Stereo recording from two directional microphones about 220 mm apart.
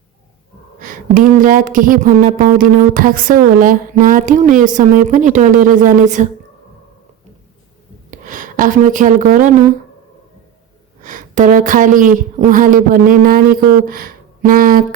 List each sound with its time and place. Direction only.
0.8 s speech: 40° right (ahead or behind)
8.1 s speech: 35° right (ahead or behind)
11.0 s speech: 35° right (ahead or behind)